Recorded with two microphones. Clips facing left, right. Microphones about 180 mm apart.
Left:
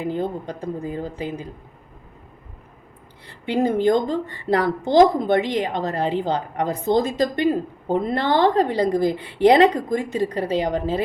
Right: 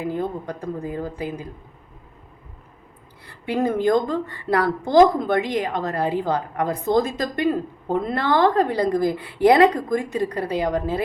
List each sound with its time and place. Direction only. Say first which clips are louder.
0.0 s a woman's voice: left 1 dB; 25° left (ahead or behind)
3.2 s a woman's voice: left 1 dB; 25° left (ahead or behind)